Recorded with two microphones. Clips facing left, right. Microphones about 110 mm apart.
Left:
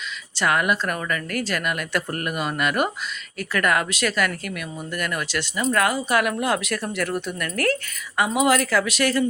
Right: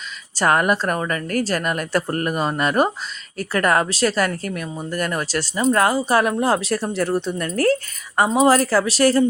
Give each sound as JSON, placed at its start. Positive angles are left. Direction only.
{"t": 0.3, "sound": "speech", "side_deg": -40}